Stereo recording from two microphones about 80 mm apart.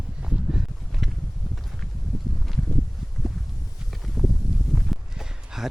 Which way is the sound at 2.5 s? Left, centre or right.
Centre.